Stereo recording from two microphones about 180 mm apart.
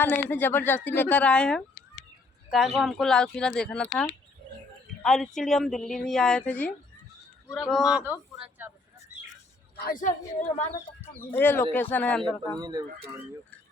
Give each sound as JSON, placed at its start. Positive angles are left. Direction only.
{"t": 0.0, "sound": "a man's voice", "side_deg": 10}
{"t": 7.7, "sound": "speech", "side_deg": -5}
{"t": 9.7, "sound": "a man's voice", "side_deg": 55}
{"t": 11.0, "sound": "a man's voice", "side_deg": 10}
{"t": 12.5, "sound": "speech", "side_deg": -20}